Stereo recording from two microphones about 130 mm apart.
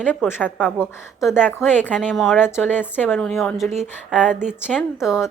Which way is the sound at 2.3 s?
15° left (ahead or behind).